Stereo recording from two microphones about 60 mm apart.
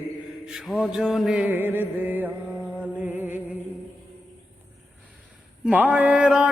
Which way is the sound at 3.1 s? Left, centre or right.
Right.